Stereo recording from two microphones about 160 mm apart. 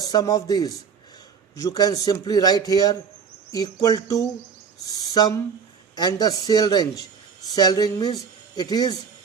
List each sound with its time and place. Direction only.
0.0 s a man's voice: 25° left (ahead or behind)